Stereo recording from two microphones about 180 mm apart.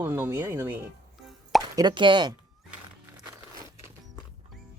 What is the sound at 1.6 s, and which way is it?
Speech, 25° right (ahead or behind).